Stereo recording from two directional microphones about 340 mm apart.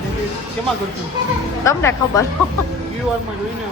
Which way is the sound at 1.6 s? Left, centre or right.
Centre.